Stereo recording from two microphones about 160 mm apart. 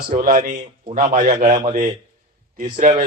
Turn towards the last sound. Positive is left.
turn(degrees=-55)  # may be behind; listen again after turning